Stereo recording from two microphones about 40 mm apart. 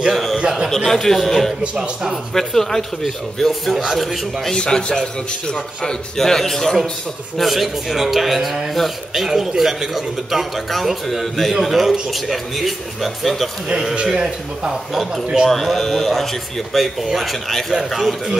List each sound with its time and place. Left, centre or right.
0.1 s a sound: centre
0.4 s a man's voice: right
0.7 s a man's voice: centre
1.6 s a man's voice: right
2.3 s a man's voice: centre
4.6 s a man's voice: left
7.3 s a man's voice: centre
14.1 s a man's voice: centre
15.4 s a man's voice: centre